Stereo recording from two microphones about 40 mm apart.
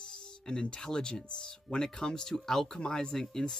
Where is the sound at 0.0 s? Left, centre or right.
Centre.